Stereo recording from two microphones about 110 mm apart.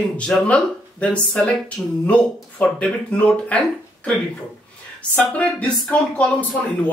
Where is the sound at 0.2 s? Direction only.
10° left (ahead or behind).